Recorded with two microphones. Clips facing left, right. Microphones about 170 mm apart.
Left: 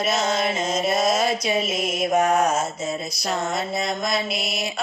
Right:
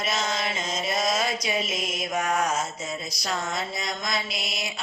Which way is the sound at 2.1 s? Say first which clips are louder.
Left 6 dB; 30° left (ahead or behind).